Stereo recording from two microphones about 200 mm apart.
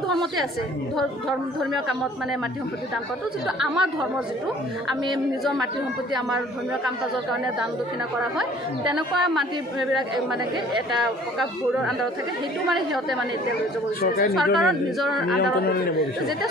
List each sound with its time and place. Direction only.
3.6 s speech: centre (ahead or behind)
8.9 s speech: centre (ahead or behind)
11.0 s speech: centre (ahead or behind)
14.0 s speech: 50° left (ahead or behind)
14.3 s speech: centre (ahead or behind)
15.3 s speech: 50° left (ahead or behind)